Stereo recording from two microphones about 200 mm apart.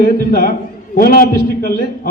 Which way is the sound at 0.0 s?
45° left (ahead or behind).